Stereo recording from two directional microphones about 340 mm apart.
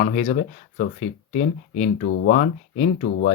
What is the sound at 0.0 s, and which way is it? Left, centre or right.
Speech, left.